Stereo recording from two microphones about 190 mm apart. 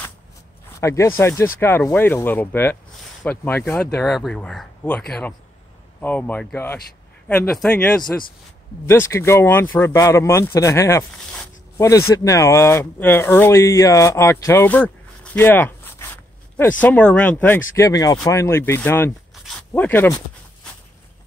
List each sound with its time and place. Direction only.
0.7 s speech: 15° left (ahead or behind)
4.0 s speech: centre (ahead or behind)